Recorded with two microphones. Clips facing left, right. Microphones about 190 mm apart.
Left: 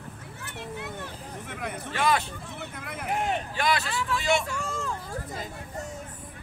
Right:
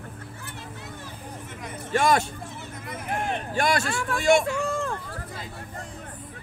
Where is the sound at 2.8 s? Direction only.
60° left (ahead or behind).